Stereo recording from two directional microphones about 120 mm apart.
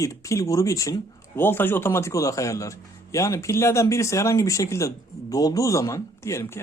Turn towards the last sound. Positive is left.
turn(degrees=20)  # may be behind; listen again after turning